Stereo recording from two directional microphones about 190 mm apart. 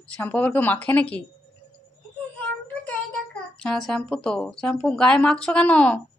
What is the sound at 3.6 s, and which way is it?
Speech, 5° left (ahead or behind).